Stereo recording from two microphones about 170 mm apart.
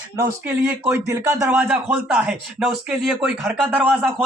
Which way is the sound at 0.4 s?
10° right (ahead or behind).